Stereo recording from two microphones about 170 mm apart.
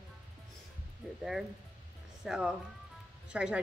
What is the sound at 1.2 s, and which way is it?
A woman's voice, centre (ahead or behind).